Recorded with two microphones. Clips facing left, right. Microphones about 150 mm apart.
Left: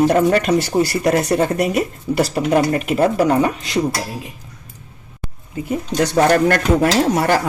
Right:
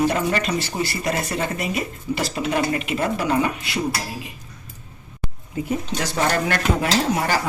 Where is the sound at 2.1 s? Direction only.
50° left (ahead or behind).